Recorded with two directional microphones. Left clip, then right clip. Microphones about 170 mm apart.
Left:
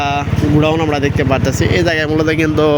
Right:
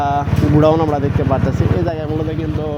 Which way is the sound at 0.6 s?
15° right (ahead or behind).